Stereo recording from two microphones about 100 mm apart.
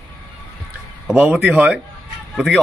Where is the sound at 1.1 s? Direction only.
15° right (ahead or behind).